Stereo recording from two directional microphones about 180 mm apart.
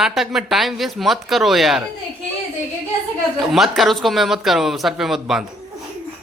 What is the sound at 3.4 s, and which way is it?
A woman's voice, centre (ahead or behind).